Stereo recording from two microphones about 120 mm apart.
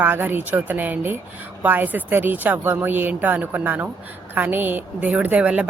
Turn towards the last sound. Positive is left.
turn(degrees=-10)  # may be behind; listen again after turning